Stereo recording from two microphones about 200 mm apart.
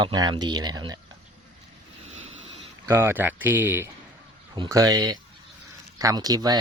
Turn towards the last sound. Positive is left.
turn(degrees=-20)  # may be behind; listen again after turning